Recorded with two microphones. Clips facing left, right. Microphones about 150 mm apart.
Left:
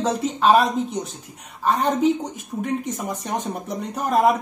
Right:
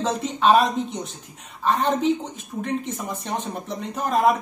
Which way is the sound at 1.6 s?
5° left (ahead or behind).